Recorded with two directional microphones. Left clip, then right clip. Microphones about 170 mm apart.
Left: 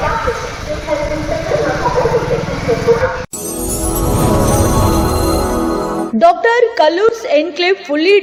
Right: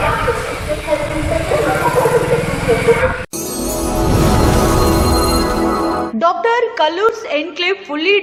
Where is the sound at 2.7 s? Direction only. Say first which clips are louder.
Right 1 dB; 15° right (ahead or behind).